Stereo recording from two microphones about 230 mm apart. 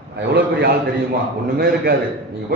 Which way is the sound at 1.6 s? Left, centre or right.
Right.